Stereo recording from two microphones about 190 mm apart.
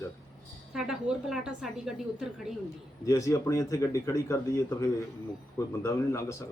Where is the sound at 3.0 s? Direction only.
15° left (ahead or behind).